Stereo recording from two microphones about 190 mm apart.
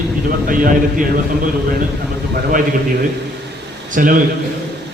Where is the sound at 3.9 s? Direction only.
45° right (ahead or behind).